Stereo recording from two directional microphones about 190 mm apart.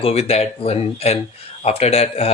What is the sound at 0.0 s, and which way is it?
Speech, 35° left (ahead or behind).